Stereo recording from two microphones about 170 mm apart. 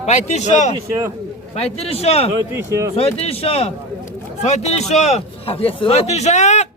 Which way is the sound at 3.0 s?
35° left (ahead or behind).